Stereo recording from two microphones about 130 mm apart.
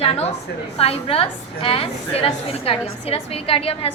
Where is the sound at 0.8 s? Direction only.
50° left (ahead or behind).